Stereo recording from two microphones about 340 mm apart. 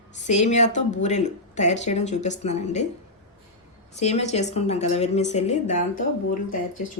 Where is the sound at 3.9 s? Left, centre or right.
Centre.